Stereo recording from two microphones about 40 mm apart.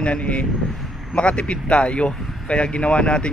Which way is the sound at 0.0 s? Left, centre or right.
Left.